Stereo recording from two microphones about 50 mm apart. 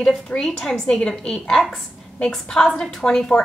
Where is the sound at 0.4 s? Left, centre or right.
Centre.